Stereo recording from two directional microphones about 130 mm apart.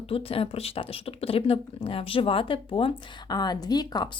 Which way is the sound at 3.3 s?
30° left (ahead or behind).